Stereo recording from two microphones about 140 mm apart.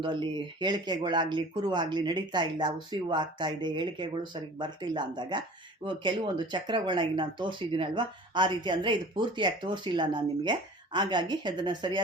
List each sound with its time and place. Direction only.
0.0 s speech: 35° right (ahead or behind)